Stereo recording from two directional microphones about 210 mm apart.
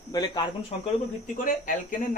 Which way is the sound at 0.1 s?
20° left (ahead or behind).